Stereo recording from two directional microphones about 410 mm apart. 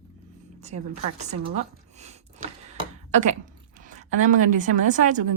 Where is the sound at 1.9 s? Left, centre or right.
Centre.